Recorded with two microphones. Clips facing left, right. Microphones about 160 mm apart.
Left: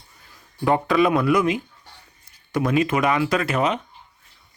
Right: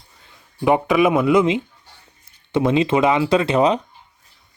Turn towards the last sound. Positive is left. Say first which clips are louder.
# right 5 dB
turn(degrees=-30)  # may be behind; listen again after turning